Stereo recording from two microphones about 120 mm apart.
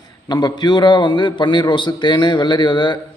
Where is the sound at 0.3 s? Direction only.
35° left (ahead or behind).